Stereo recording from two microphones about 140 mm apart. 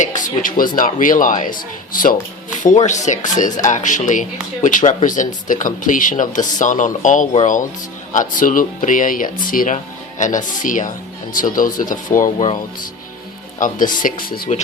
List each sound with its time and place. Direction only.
0.0 s speech: 70° left (ahead or behind)
2.6 s speech: 60° left (ahead or behind)
13.6 s speech: 70° left (ahead or behind); by 14.5 s 90° left